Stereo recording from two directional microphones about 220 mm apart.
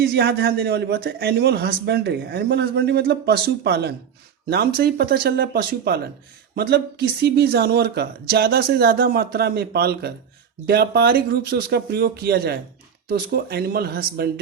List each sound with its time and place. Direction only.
0.0 s a man's voice: 45° right (ahead or behind)